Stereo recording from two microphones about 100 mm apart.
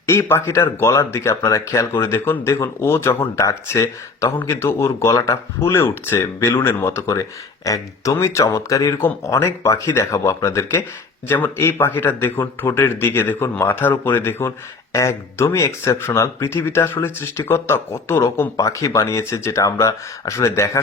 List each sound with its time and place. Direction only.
0.0 s speech: 25° left (ahead or behind)
9.0 s speech: 25° left (ahead or behind)